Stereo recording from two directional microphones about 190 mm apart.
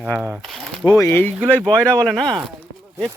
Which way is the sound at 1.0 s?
10° left (ahead or behind).